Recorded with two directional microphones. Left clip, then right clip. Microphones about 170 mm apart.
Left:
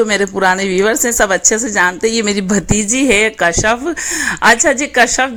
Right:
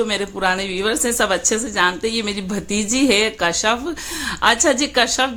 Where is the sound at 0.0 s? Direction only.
40° left (ahead or behind).